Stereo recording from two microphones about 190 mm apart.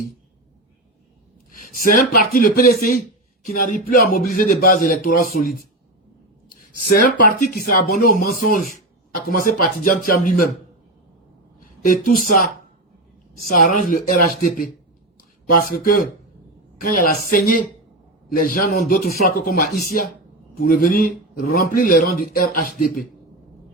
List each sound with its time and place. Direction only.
1.8 s a man's voice: 45° left (ahead or behind)
6.7 s a man's voice: 50° left (ahead or behind)
11.9 s a man's voice: 45° left (ahead or behind)
13.5 s a man's voice: 45° left (ahead or behind)